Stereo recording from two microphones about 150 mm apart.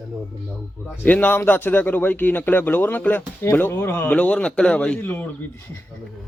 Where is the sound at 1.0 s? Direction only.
10° left (ahead or behind).